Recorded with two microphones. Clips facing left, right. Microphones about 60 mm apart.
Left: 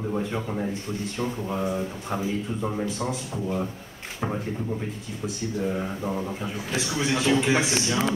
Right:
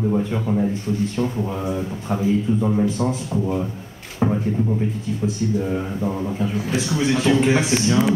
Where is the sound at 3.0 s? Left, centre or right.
Right.